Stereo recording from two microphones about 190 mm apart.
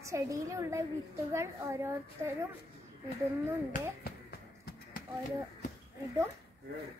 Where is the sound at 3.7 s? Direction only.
55° left (ahead or behind).